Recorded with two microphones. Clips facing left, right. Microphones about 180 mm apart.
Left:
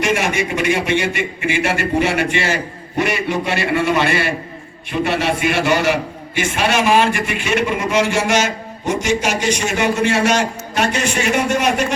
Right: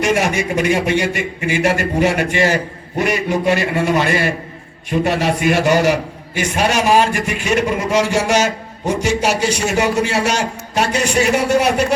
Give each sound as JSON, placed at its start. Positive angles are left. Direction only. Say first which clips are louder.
{"t": 0.0, "sound": "a man's voice", "louder": "right 2 dB", "side_deg": -40}